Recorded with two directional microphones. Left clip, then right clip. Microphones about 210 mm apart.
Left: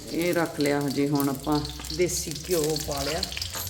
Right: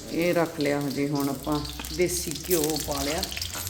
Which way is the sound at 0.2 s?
5° left (ahead or behind).